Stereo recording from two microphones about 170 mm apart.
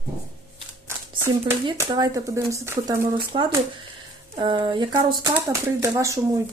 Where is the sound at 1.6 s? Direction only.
25° right (ahead or behind).